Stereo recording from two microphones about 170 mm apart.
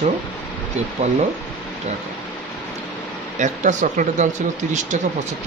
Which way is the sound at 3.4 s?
45° right (ahead or behind).